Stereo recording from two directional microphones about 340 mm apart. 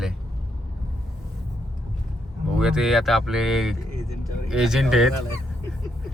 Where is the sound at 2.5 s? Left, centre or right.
Centre.